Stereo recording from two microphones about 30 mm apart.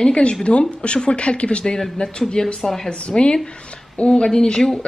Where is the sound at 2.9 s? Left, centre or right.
Left.